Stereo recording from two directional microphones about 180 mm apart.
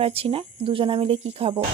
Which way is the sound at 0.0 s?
30° right (ahead or behind).